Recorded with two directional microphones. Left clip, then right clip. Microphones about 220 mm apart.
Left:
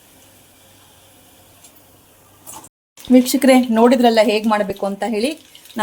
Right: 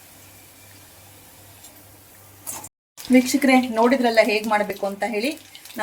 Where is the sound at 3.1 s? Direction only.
45° left (ahead or behind).